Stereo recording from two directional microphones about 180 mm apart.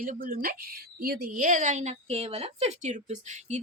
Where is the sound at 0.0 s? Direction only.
50° right (ahead or behind).